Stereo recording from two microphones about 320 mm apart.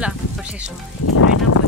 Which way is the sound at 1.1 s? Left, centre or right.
Left.